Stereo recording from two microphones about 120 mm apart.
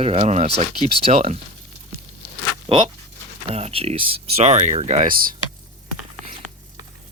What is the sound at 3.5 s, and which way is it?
Speech, 60° right (ahead or behind).